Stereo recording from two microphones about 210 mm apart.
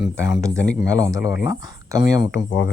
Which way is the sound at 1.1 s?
15° right (ahead or behind).